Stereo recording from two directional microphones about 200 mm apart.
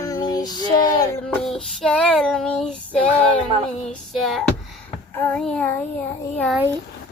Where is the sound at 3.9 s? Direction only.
Centre (ahead or behind).